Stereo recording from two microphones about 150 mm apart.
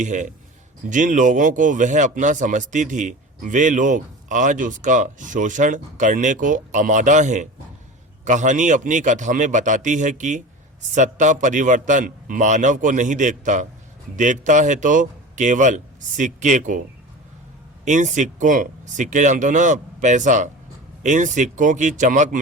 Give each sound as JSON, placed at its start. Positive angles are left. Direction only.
{"t": 0.0, "sound": "speech", "side_deg": -55}
{"t": 17.8, "sound": "speech", "side_deg": -55}